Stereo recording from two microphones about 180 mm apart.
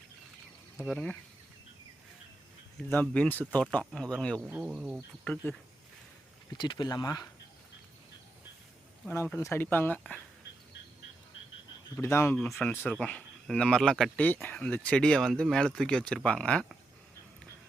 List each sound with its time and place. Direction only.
0.9 s speech: 5° left (ahead or behind)
2.7 s speech: 5° left (ahead or behind)
4.4 s speech: 5° right (ahead or behind)
5.2 s speech: 5° left (ahead or behind)
6.5 s speech: 25° left (ahead or behind)
9.3 s speech: 10° left (ahead or behind)
11.9 s speech: 15° left (ahead or behind)